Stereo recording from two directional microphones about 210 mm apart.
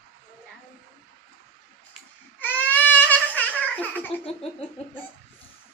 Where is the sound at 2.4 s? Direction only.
5° left (ahead or behind).